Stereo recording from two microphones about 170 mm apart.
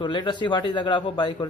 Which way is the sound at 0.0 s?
25° left (ahead or behind).